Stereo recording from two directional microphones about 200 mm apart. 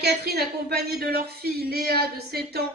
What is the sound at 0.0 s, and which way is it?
Speech, 55° right (ahead or behind).